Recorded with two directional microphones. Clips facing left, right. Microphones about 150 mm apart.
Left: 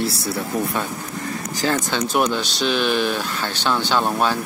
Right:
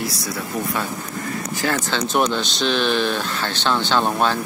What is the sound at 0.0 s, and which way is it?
Speech, 30° left (ahead or behind).